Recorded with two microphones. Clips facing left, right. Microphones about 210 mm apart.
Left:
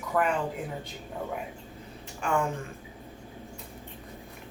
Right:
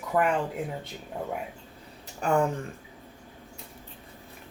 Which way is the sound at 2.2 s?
40° right (ahead or behind).